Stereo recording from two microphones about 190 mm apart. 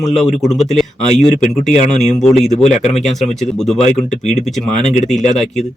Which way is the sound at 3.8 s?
35° left (ahead or behind).